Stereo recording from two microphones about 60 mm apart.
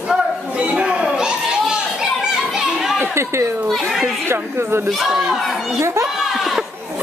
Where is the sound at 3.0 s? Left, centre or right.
Right.